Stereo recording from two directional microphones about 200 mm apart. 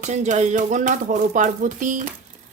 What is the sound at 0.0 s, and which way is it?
Speech, 35° right (ahead or behind).